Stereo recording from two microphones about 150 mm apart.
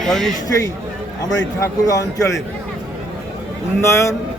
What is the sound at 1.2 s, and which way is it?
Speech, 20° left (ahead or behind).